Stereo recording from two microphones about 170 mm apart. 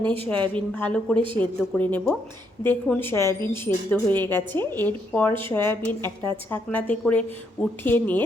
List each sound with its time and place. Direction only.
0.0 s speech: 35° right (ahead or behind)
0.3 s a woman's voice: 5° left (ahead or behind)